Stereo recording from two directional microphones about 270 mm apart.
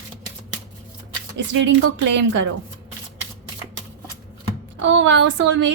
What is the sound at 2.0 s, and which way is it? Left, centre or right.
Speech, right.